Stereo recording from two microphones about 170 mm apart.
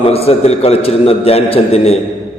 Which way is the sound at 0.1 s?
35° left (ahead or behind).